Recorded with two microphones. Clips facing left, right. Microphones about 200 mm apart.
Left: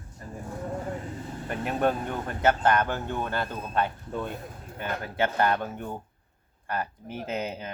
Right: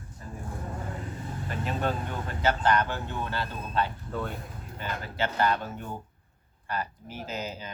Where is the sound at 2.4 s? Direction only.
50° left (ahead or behind).